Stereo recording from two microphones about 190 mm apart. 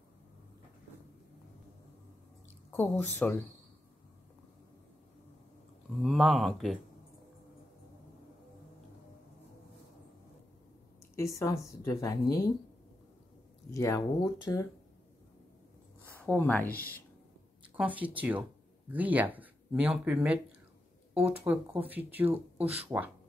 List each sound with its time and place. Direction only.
2.7 s a woman's voice: 10° left (ahead or behind)
6.0 s speech: centre (ahead or behind)
11.1 s a woman's voice: 15° left (ahead or behind)
13.7 s a woman's voice: 15° left (ahead or behind)
16.3 s a woman's voice: 10° left (ahead or behind)
17.7 s speech: 10° right (ahead or behind)
22.6 s speech: 30° right (ahead or behind)
22.8 s speech: 10° right (ahead or behind)